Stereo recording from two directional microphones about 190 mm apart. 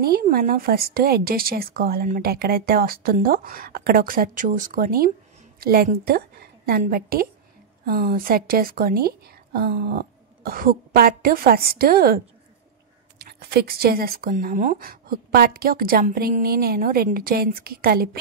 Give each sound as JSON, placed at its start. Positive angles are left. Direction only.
{"t": 0.0, "sound": "speech", "side_deg": -55}
{"t": 13.2, "sound": "speech", "side_deg": -55}